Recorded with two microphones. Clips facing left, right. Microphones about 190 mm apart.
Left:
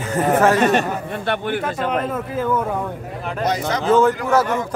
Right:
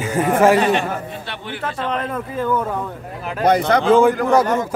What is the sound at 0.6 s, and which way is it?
Speech, 45° left (ahead or behind).